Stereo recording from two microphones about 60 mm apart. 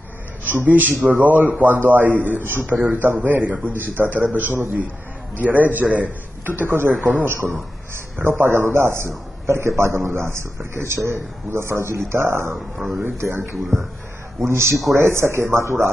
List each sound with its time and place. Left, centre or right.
0.7 s a man's voice: right